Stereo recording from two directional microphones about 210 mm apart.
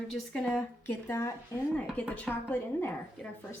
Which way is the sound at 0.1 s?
5° left (ahead or behind).